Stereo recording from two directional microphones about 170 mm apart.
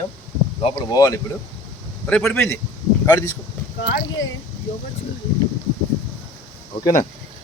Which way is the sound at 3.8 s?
90° left.